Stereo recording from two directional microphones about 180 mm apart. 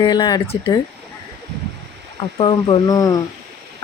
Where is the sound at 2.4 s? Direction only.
30° left (ahead or behind).